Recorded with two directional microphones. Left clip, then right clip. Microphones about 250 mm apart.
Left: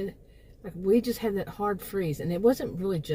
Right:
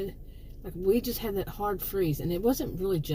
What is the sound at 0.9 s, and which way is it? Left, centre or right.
Speech, left.